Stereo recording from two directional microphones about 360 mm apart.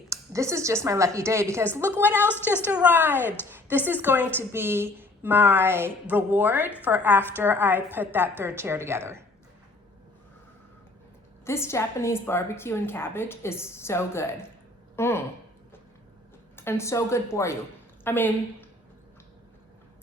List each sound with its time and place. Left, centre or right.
0.1 s a woman's voice: centre
11.4 s a woman's voice: centre
16.6 s a woman's voice: centre